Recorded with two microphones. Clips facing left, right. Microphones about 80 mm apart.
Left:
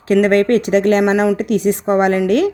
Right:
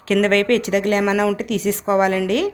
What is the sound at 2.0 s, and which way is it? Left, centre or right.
Speech, left.